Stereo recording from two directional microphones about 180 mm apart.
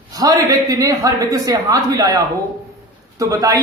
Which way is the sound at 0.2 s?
20° right (ahead or behind).